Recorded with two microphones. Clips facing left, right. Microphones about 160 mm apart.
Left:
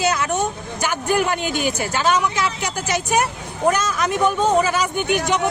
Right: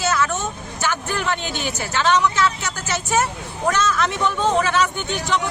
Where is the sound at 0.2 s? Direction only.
15° left (ahead or behind).